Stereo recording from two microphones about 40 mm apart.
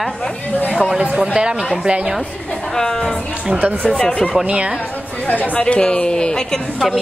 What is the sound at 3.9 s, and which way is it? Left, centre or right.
Speech, left.